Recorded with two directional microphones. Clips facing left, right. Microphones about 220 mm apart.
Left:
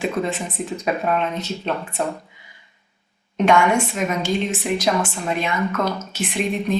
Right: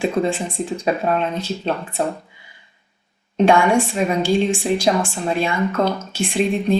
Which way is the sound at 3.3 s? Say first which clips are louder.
Right 2 dB; 30° right (ahead or behind).